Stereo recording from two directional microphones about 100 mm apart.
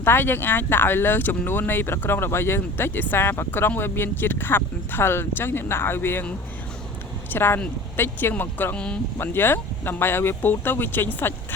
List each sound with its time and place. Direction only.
0.0 s speech: 20° left (ahead or behind)
9.1 s speech: 20° left (ahead or behind)